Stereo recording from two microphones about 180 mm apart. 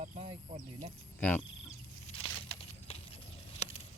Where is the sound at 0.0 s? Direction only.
35° right (ahead or behind).